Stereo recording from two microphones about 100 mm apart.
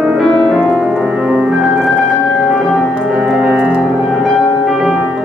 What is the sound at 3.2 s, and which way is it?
Music, 5° right (ahead or behind).